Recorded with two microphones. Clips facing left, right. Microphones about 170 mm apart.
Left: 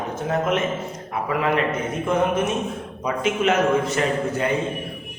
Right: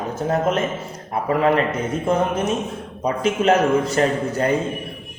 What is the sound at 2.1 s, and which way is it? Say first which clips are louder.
A man's voice: even; 35° right (ahead or behind).